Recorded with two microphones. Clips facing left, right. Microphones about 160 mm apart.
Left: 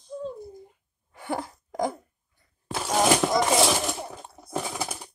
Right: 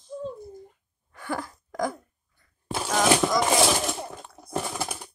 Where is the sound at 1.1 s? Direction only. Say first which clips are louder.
Left 1 dB; 25° left (ahead or behind).